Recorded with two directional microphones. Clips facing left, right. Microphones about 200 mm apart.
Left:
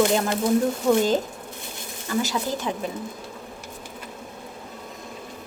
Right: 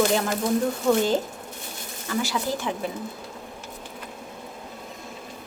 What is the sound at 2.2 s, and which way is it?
Speech, 20° left (ahead or behind).